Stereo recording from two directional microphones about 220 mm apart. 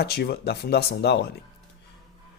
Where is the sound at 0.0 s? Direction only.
45° left (ahead or behind).